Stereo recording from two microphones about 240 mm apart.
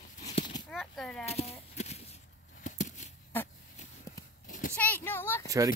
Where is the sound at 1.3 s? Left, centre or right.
Left.